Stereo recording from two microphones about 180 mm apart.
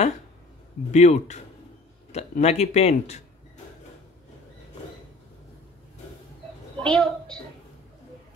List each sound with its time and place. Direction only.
0.9 s speech: 40° left (ahead or behind)
6.8 s a woman's voice: 5° left (ahead or behind)